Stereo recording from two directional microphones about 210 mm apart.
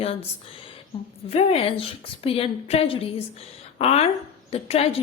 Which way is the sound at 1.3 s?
30° left (ahead or behind).